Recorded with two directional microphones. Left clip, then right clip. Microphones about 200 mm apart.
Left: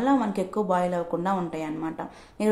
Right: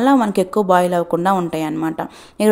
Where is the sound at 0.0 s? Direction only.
40° right (ahead or behind).